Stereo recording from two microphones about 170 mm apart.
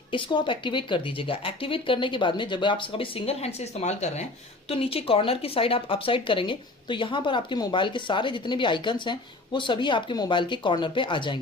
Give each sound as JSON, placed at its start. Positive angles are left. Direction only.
{"t": 0.1, "sound": "speech", "side_deg": 30}